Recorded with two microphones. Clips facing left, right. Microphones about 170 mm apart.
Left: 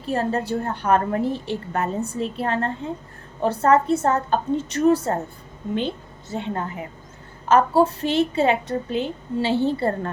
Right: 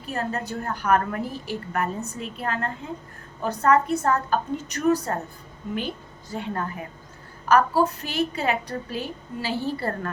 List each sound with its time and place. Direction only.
0.0 s a woman's voice: 30° left (ahead or behind)